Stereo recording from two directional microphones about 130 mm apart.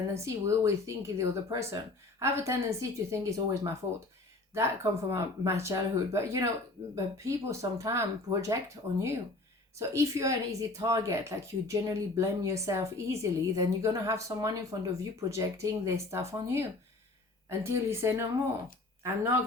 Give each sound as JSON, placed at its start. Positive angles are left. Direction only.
{"t": 0.1, "sound": "speech", "side_deg": -20}
{"t": 9.7, "sound": "speech", "side_deg": -25}
{"t": 17.7, "sound": "speech", "side_deg": -20}